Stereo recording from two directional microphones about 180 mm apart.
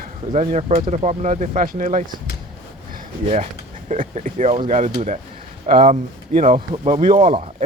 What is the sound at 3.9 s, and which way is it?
Speech, 45° right (ahead or behind).